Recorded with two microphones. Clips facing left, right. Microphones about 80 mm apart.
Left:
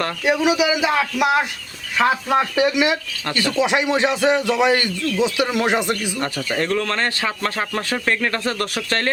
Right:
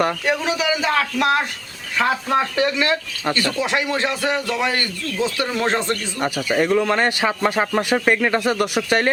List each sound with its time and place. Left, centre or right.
0.3 s a man's voice: centre
6.1 s a man's voice: centre